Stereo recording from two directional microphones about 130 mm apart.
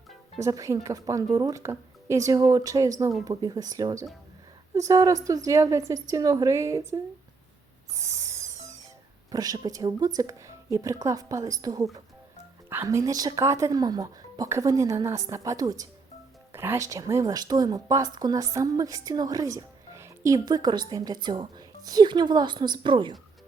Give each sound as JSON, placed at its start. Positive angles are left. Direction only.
{"t": 0.3, "sound": "a woman's voice", "side_deg": -25}
{"t": 7.9, "sound": "owl", "side_deg": -25}
{"t": 9.3, "sound": "a woman's voice", "side_deg": -30}
{"t": 16.5, "sound": "a woman's voice", "side_deg": -20}